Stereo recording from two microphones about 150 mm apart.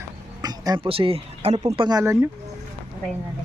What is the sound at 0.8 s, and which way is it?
Speech, 40° right (ahead or behind).